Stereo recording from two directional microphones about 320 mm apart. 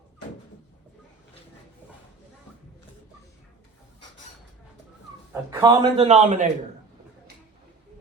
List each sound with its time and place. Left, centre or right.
5.3 s a man's voice: centre